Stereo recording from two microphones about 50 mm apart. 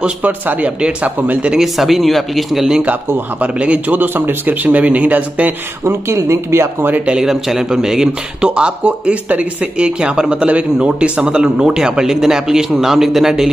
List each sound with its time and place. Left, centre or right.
0.5 s speech: right
1.5 s speech: centre
3.3 s speech: right
4.6 s speech: right
5.9 s speech: right
7.1 s a man's voice: centre